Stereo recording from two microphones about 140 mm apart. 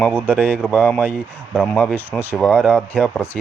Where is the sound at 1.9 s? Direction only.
15° right (ahead or behind).